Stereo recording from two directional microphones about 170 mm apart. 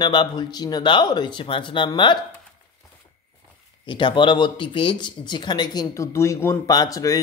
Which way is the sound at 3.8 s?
30° left (ahead or behind).